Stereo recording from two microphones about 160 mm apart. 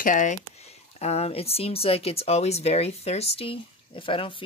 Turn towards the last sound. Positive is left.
turn(degrees=35)  # may be behind; listen again after turning